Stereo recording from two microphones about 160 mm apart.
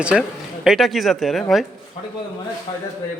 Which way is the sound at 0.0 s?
5° right (ahead or behind).